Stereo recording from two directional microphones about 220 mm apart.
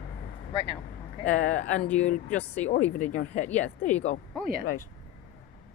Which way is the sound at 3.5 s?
5° left (ahead or behind).